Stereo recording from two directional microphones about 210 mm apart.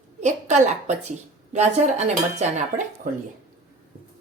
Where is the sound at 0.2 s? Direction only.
35° right (ahead or behind).